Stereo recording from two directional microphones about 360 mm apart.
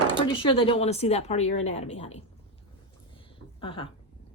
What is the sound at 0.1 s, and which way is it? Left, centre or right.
Speech, centre.